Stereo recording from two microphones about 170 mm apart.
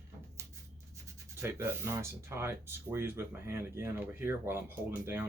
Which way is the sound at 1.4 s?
15° right (ahead or behind).